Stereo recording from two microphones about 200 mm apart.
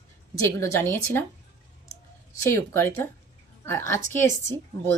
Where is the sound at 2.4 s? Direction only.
15° left (ahead or behind).